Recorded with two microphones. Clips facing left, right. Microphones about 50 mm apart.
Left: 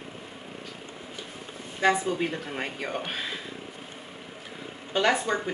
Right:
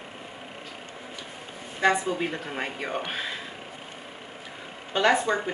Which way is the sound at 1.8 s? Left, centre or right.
Centre.